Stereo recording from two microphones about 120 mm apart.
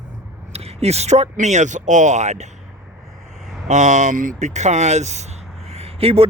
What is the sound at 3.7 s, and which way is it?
Speech, 85° right.